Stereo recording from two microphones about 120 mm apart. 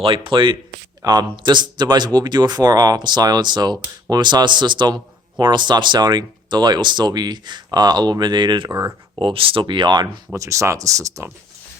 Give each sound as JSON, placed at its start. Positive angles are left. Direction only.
{"t": 0.0, "sound": "speech", "side_deg": -50}
{"t": 1.0, "sound": "speech", "side_deg": -35}
{"t": 10.3, "sound": "speech", "side_deg": -25}